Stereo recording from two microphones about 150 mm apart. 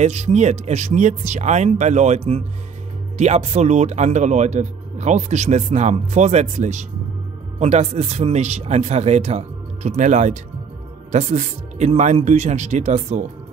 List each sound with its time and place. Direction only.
0.0 s speech: 50° right (ahead or behind)